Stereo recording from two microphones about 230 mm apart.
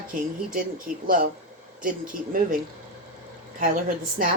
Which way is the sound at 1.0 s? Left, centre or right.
Right.